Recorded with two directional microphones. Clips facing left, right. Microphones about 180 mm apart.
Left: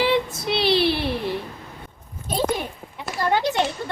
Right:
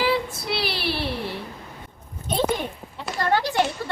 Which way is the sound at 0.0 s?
20° left (ahead or behind).